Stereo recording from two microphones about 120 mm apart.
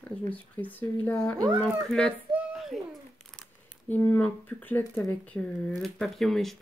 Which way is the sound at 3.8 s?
15° left (ahead or behind).